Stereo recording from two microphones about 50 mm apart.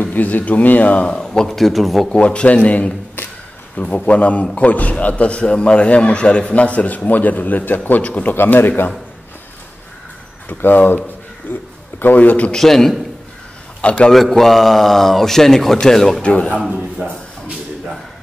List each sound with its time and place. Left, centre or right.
0.0 s speech: left
1.2 s a man's voice: centre
1.6 s speech: centre
2.0 s a man's voice: left
3.2 s a sound: left
3.7 s a man's voice: left
10.6 s a man's voice: left
12.5 s a man's voice: centre
13.7 s a man's voice: left
14.1 s a man's voice: centre
16.2 s a man's voice: left
17.0 s speech: right